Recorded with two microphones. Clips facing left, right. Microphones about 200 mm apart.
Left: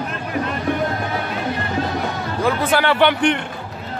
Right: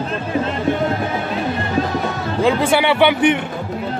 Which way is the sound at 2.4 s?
15° right (ahead or behind).